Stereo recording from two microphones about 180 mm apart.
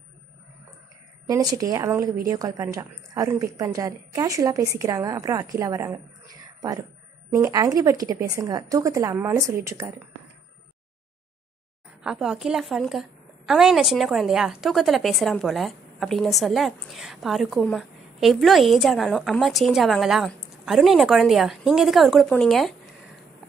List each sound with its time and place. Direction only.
1.3 s a woman's voice: 20° right (ahead or behind)
12.0 s a woman's voice: 5° right (ahead or behind)